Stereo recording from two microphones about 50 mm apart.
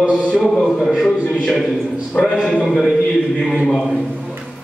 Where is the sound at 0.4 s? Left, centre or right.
Centre.